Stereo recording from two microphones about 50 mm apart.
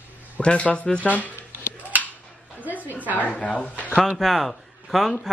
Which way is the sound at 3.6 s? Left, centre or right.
Left.